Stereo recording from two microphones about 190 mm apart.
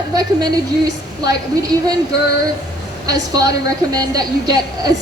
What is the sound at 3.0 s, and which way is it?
A woman's voice, 20° right (ahead or behind).